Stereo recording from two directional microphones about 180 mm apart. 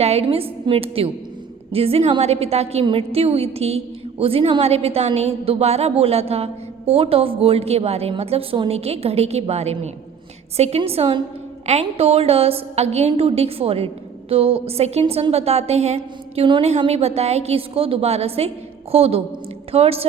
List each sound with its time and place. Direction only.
0.0 s a woman's voice: 35° right (ahead or behind)